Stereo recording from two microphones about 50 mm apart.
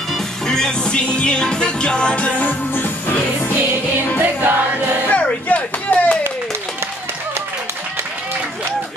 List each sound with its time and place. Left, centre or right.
0.1 s music: centre; by 2.5 s left
2.7 s music: left
4.2 s music: right
5.5 s a sound: left